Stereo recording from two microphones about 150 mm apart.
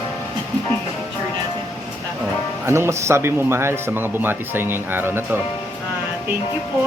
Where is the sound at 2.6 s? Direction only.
15° right (ahead or behind).